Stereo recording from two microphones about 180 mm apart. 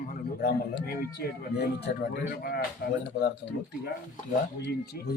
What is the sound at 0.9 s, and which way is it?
Speech, 60° left (ahead or behind).